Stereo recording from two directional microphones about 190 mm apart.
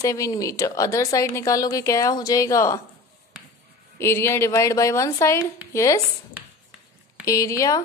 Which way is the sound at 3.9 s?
10° left (ahead or behind).